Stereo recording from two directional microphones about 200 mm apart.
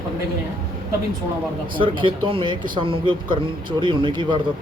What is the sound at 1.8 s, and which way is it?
Speech, 25° right (ahead or behind).